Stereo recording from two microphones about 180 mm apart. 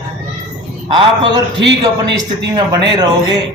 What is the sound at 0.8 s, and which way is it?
Speech, 30° right (ahead or behind).